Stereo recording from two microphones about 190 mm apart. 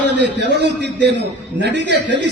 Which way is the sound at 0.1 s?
65° right (ahead or behind).